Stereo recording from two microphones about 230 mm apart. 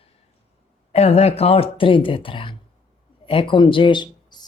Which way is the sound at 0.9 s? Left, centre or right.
Left.